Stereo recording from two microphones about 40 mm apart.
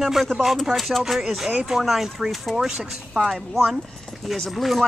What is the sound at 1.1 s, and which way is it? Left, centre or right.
Speech, centre.